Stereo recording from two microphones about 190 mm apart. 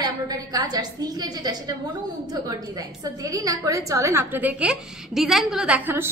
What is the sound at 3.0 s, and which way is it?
A woman's voice, 20° right (ahead or behind).